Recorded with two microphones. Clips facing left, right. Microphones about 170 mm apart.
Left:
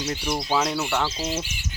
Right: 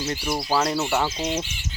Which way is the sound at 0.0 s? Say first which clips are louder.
Right 1 dB; 5° right (ahead or behind).